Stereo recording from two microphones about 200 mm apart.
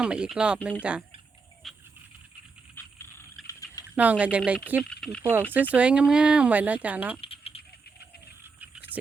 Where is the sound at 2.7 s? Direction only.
10° left (ahead or behind).